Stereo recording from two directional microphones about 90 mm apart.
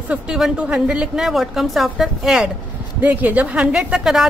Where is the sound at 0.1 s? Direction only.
10° right (ahead or behind).